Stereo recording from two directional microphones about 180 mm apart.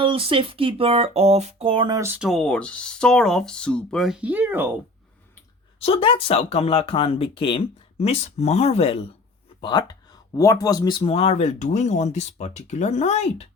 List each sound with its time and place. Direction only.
0.0 s music: 30° right (ahead or behind)
2.0 s speech: 10° right (ahead or behind)
5.8 s speech: 30° left (ahead or behind)